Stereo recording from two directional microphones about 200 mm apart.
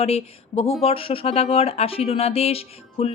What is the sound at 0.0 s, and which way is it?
Speech, 30° left (ahead or behind).